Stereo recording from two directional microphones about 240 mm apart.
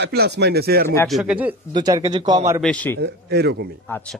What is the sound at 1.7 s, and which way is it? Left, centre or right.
Speech, centre.